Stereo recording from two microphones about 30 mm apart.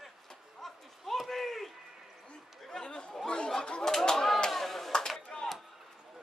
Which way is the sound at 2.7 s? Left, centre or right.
Left.